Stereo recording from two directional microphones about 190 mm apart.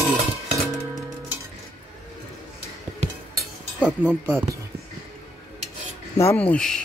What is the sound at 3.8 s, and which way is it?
Speech, 10° right (ahead or behind).